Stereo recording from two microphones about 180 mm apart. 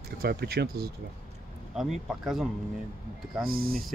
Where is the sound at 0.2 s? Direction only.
60° right (ahead or behind).